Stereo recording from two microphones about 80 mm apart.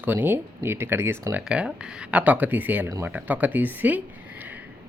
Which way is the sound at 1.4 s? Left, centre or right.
Centre.